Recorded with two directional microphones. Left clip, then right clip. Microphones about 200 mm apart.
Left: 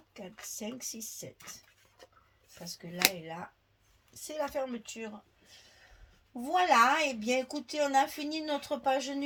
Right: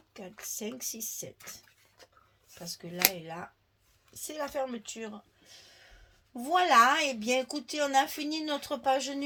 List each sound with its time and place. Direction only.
0.1 s speech: 40° right (ahead or behind)
2.6 s speech: 40° right (ahead or behind)
4.1 s speech: 40° right (ahead or behind)
6.3 s speech: 45° right (ahead or behind)